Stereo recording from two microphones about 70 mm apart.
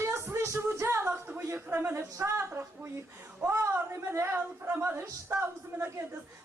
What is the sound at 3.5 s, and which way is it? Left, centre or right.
Speech, right.